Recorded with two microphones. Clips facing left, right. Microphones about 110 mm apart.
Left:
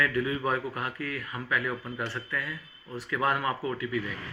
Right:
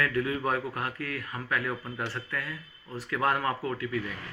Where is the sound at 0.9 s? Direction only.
40° right (ahead or behind).